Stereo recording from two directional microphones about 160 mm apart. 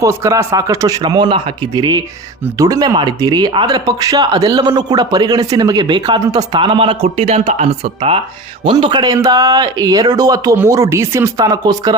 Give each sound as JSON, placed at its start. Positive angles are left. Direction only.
{"t": 0.0, "sound": "speech", "side_deg": -20}